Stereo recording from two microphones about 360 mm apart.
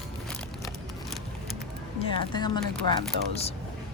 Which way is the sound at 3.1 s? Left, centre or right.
Right.